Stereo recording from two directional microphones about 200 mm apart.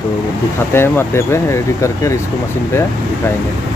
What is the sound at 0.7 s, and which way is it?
Speech, 10° left (ahead or behind).